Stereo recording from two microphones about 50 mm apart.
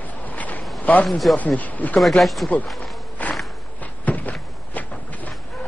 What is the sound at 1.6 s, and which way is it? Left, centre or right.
Speech, left.